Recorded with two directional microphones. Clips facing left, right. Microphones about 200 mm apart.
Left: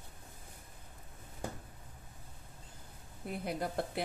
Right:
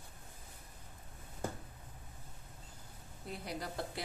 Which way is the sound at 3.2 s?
55° left (ahead or behind).